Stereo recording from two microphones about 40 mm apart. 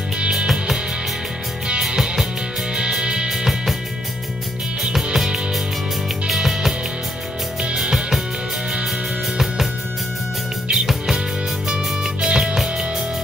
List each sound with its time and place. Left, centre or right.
1.9 s music: centre
6.2 s music: centre
7.7 s music: centre
10.7 s music: centre